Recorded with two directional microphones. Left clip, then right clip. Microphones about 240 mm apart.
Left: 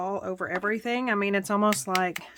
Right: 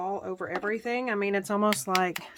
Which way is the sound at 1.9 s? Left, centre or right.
Centre.